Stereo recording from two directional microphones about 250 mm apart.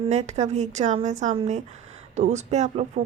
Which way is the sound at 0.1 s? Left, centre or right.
Right.